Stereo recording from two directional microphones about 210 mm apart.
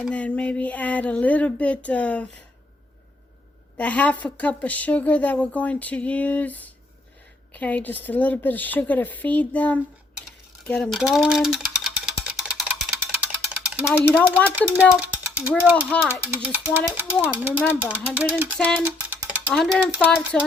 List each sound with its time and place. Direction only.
0.0 s speech: 5° left (ahead or behind)
3.8 s speech: 5° left (ahead or behind)
10.7 s a sound: centre (ahead or behind)
14.5 s speech: 5° right (ahead or behind)
15.7 s speech: 10° left (ahead or behind)
16.2 s speech: 10° right (ahead or behind)